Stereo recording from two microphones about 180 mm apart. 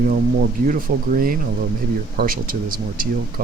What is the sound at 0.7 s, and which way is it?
Speech, 50° right (ahead or behind).